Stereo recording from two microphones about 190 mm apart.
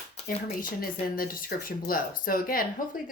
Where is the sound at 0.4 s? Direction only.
50° left (ahead or behind).